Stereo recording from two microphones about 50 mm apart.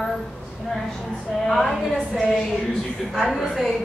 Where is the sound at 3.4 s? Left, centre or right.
Centre.